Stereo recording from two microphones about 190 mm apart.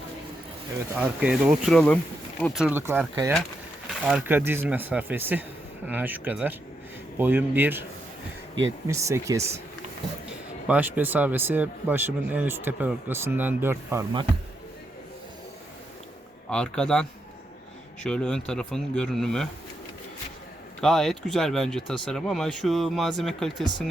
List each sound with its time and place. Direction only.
0.9 s speech: 5° right (ahead or behind)
2.6 s speech: 10° right (ahead or behind)
8.9 s speech: 15° right (ahead or behind)
10.7 s speech: 10° right (ahead or behind)
16.5 s speech: 5° left (ahead or behind)
20.8 s speech: centre (ahead or behind)